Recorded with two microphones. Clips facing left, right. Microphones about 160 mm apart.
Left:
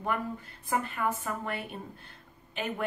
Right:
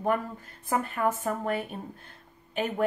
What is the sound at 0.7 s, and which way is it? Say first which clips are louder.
Speech: right 3 dB; 45° right (ahead or behind).